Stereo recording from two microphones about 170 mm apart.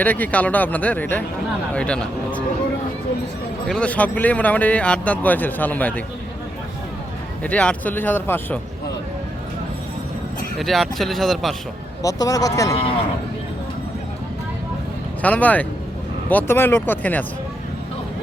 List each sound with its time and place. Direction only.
0.0 s speech: 10° left (ahead or behind)
3.7 s speech: 5° left (ahead or behind)
7.4 s speech: 10° left (ahead or behind)
10.6 s speech: centre (ahead or behind)
12.0 s speech: 20° left (ahead or behind)
15.2 s speech: 10° left (ahead or behind)